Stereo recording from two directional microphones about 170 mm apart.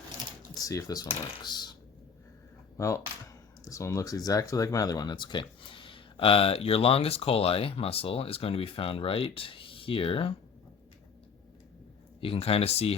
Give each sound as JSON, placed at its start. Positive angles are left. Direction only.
{"t": 0.6, "sound": "speech", "side_deg": 20}
{"t": 2.7, "sound": "speech", "side_deg": 20}
{"t": 12.2, "sound": "speech", "side_deg": 35}